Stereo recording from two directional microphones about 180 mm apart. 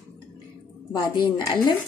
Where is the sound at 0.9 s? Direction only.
20° left (ahead or behind).